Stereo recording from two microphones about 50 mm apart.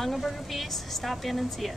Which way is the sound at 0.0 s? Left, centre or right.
Centre.